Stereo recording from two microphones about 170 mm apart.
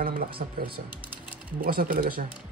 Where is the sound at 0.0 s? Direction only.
65° right (ahead or behind).